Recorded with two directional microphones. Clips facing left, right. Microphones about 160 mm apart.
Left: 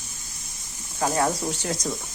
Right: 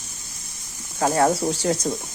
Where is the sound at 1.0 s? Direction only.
35° right (ahead or behind).